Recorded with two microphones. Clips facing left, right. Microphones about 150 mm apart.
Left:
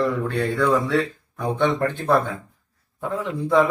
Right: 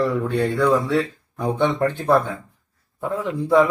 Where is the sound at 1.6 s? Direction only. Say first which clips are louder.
Right 1 dB; 15° right (ahead or behind).